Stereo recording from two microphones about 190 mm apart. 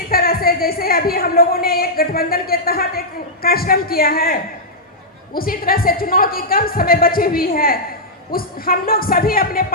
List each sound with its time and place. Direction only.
0.1 s speech: 50° left (ahead or behind)